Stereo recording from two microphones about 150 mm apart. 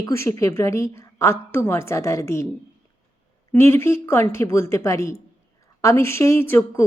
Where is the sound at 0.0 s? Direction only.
20° left (ahead or behind).